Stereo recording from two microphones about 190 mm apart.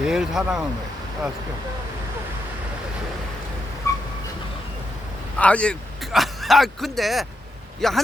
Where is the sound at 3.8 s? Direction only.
15° left (ahead or behind).